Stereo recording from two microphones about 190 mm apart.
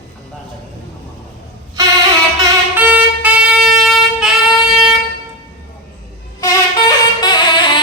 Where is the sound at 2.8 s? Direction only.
10° right (ahead or behind).